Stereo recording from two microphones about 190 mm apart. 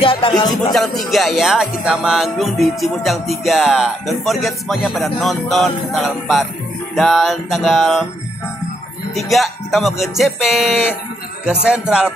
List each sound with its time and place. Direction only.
0.0 s speech: 25° left (ahead or behind)
0.7 s music: centre (ahead or behind)
9.1 s music: centre (ahead or behind)